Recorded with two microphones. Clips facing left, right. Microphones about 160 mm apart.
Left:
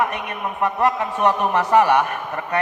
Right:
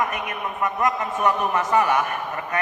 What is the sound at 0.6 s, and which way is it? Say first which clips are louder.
A man's voice: left 3 dB; 35° left (ahead or behind).